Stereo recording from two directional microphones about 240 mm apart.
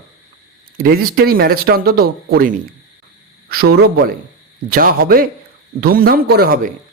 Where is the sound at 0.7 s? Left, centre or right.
Right.